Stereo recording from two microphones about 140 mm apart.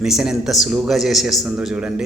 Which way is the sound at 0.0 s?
5° right (ahead or behind).